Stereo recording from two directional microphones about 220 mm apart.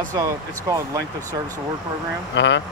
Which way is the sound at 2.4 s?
55° left (ahead or behind).